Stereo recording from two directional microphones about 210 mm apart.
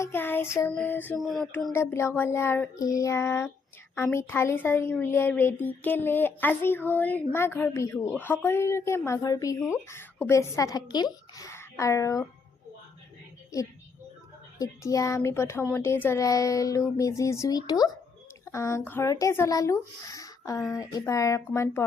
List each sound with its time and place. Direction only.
0.0 s speech: 10° left (ahead or behind)
1.7 s a woman's voice: 10° left (ahead or behind)
14.6 s speech: 15° left (ahead or behind)